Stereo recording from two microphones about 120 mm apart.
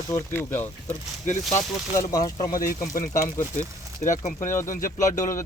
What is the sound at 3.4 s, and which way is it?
Speech, 90° left.